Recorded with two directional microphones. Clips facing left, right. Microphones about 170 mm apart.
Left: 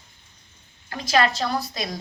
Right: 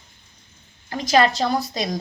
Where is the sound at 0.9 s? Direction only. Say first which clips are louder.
Right 4 dB; 30° right (ahead or behind).